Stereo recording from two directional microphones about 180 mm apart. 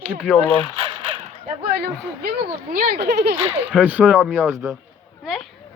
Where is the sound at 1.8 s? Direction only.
55° right (ahead or behind).